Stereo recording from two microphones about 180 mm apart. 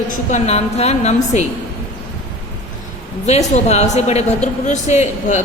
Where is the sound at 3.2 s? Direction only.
35° left (ahead or behind).